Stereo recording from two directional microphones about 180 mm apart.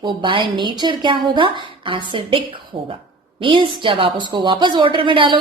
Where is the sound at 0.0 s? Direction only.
25° right (ahead or behind).